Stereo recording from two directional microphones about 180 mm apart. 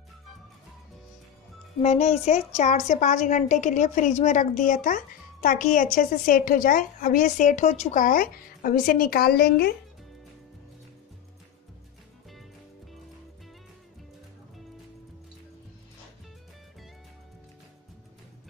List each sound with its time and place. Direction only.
1.8 s a woman's voice: 40° left (ahead or behind); by 9.7 s 60° left (ahead or behind)